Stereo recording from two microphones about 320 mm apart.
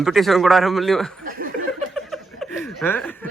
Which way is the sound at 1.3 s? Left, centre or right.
Right.